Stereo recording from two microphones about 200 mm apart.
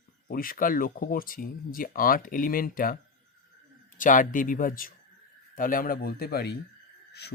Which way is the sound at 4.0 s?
40° left (ahead or behind).